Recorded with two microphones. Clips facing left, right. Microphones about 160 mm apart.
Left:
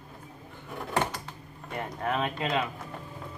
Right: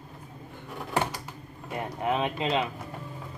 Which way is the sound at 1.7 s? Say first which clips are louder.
Right 2 dB; 15° right (ahead or behind).